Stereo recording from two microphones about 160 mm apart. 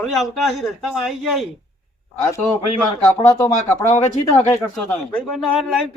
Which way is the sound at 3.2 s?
15° left (ahead or behind).